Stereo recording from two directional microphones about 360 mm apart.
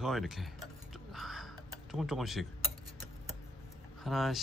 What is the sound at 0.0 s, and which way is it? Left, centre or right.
Speech, centre.